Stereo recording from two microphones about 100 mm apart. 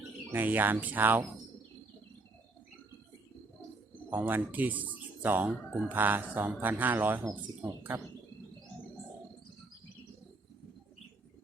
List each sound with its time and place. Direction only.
0.3 s speech: 20° right (ahead or behind)
4.1 s speech: 15° right (ahead or behind)